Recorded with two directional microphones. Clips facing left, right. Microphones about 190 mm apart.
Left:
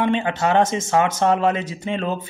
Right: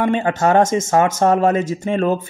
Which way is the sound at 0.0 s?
45° right (ahead or behind).